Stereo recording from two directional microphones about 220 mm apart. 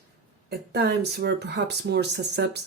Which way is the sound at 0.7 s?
50° right (ahead or behind).